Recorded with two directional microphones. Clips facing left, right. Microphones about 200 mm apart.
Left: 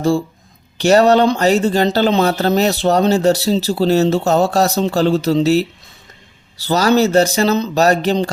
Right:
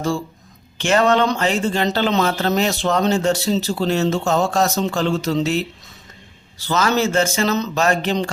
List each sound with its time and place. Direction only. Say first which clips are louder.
0.8 s speech: left 5 dB; 40° left (ahead or behind)
6.7 s speech: left 5 dB; 35° left (ahead or behind)